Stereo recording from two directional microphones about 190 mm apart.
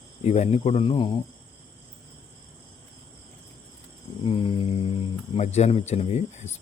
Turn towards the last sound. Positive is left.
turn(degrees=35)  # may be behind; listen again after turning